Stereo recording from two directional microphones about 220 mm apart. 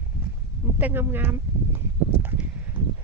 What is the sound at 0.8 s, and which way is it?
Speech, 10° right (ahead or behind).